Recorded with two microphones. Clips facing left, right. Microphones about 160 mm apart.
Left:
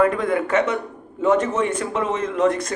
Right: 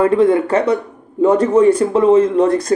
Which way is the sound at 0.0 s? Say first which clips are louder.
Right 7 dB; 25° right (ahead or behind).